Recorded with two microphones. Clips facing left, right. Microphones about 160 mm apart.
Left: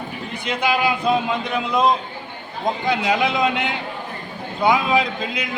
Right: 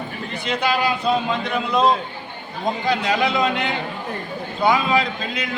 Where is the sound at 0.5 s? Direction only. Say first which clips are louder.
Left 1 dB; 10° left (ahead or behind).